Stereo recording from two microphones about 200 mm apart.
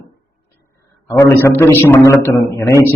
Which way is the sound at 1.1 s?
15° left (ahead or behind).